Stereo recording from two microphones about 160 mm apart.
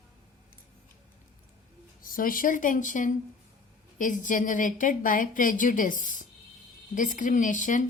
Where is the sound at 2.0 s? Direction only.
60° left (ahead or behind).